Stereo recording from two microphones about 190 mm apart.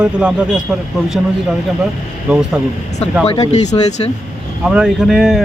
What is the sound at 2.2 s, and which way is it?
Speech, 5° right (ahead or behind).